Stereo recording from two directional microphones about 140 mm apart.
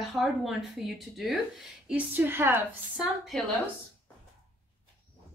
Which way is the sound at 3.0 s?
Centre (ahead or behind).